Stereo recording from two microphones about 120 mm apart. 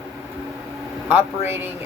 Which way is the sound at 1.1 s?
20° right (ahead or behind).